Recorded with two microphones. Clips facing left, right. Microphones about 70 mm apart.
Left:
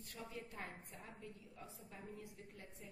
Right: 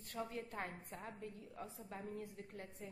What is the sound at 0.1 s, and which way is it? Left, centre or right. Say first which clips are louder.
A woman's voice: right 6 dB; right.